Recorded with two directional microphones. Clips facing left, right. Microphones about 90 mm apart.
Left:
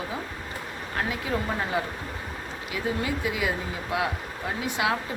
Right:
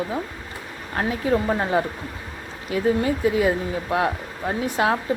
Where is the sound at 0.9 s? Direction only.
35° right (ahead or behind).